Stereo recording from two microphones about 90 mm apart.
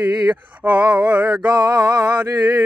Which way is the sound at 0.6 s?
15° right (ahead or behind).